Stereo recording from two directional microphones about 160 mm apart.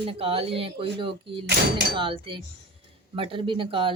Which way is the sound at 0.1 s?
35° right (ahead or behind).